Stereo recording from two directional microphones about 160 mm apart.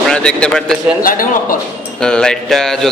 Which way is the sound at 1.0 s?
60° left (ahead or behind).